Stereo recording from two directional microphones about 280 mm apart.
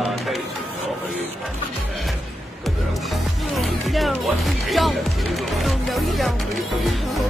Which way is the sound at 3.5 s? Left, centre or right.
Centre.